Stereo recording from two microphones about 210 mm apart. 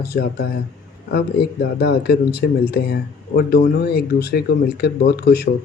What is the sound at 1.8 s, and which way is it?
Speech, 50° left (ahead or behind).